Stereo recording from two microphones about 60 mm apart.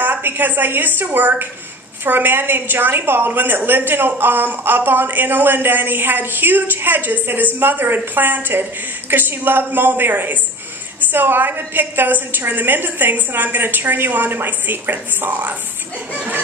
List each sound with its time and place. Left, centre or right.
0.0 s a woman's voice: right